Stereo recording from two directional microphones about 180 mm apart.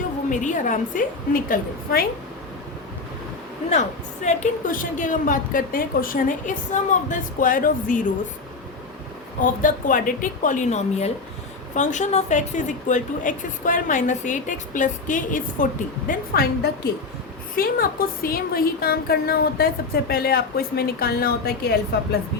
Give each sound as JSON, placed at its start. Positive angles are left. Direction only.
{"t": 0.3, "sound": "a woman's voice", "side_deg": 45}
{"t": 3.7, "sound": "a woman's voice", "side_deg": 40}
{"t": 9.4, "sound": "a woman's voice", "side_deg": 45}
{"t": 16.0, "sound": "a woman's voice", "side_deg": 60}